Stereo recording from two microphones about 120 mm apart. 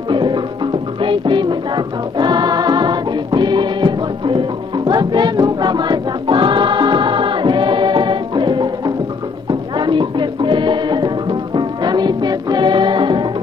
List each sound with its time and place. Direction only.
0.1 s music: 40° right (ahead or behind)